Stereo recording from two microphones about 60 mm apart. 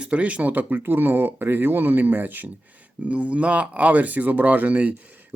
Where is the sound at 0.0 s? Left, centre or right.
Right.